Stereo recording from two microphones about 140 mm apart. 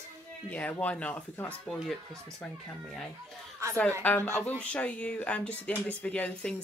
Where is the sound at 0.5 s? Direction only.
10° left (ahead or behind).